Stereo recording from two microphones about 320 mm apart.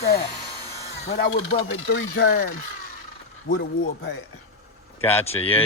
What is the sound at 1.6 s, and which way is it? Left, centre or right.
Speech, left.